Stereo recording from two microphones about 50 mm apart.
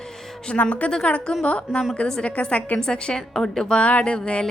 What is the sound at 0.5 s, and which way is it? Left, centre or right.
A woman's voice, left.